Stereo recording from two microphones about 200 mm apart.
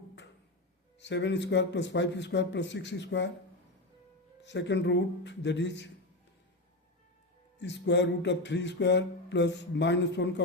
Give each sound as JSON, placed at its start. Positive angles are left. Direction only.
{"t": 0.9, "sound": "speech", "side_deg": 60}
{"t": 4.4, "sound": "speech", "side_deg": 60}
{"t": 7.6, "sound": "speech", "side_deg": 60}